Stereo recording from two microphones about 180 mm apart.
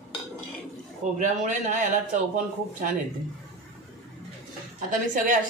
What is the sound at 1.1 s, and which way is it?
Speech, 45° right (ahead or behind).